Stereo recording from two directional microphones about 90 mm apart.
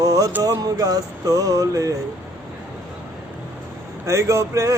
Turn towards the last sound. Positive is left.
turn(degrees=-35)  # may be behind; listen again after turning